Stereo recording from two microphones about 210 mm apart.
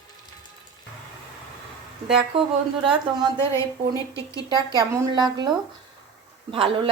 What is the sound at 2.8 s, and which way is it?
Speech, 25° right (ahead or behind).